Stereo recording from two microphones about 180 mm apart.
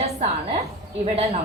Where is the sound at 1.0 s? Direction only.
35° right (ahead or behind).